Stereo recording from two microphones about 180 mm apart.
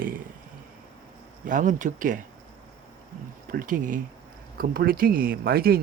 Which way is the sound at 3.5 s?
50° right (ahead or behind).